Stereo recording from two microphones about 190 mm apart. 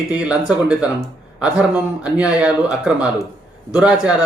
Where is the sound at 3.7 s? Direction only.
5° right (ahead or behind).